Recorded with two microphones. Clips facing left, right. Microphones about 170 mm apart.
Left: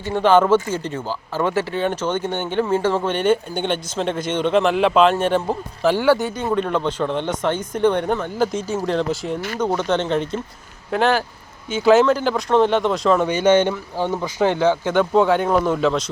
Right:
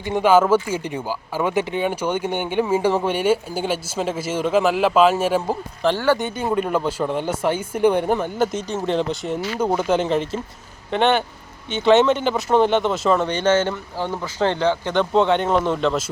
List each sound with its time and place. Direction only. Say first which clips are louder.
0.0 s speech: even; 15° right (ahead or behind)
5.8 s speech: left 3 dB; 10° left (ahead or behind)
13.2 s speech: left 3 dB; 10° left (ahead or behind)